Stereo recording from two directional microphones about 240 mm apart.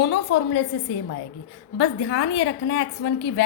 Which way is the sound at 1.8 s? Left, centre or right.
Left.